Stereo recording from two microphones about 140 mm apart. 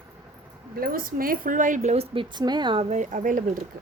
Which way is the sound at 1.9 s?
40° right (ahead or behind).